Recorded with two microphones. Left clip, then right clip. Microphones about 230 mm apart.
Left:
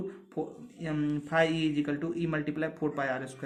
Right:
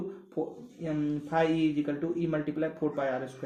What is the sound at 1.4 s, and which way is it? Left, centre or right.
Speech, left.